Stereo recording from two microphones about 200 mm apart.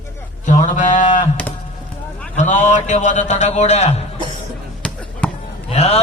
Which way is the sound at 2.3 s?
35° left (ahead or behind).